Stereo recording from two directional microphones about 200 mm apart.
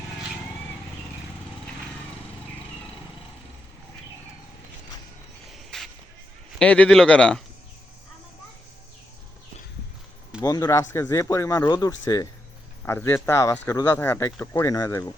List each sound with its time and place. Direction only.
5.5 s a sound: centre (ahead or behind)
6.6 s a man's voice: 5° left (ahead or behind)
10.4 s speech: 15° left (ahead or behind)